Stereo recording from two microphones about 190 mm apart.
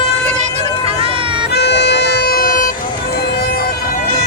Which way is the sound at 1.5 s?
65° left (ahead or behind).